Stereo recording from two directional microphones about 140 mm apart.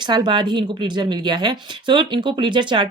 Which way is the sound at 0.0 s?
30° right (ahead or behind).